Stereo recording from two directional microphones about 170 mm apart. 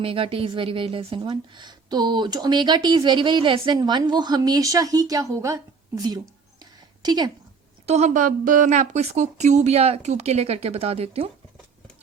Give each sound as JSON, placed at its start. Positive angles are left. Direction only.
{"t": 0.0, "sound": "a woman's voice", "side_deg": -30}
{"t": 7.9, "sound": "a woman's voice", "side_deg": -40}